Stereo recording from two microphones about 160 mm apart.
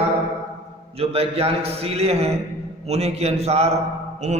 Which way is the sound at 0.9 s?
40° right (ahead or behind).